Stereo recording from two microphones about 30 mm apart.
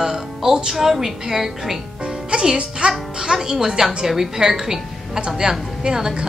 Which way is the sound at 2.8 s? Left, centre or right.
Right.